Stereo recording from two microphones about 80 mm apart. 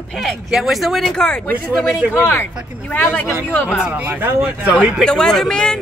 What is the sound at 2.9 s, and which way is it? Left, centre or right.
Speech, left.